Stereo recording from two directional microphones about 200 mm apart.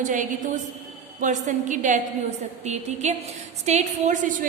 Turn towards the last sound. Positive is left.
turn(degrees=-35)  # may be behind; listen again after turning